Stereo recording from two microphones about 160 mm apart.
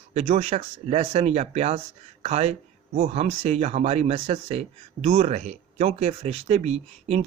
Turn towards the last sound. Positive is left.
turn(degrees=-40)  # may be behind; listen again after turning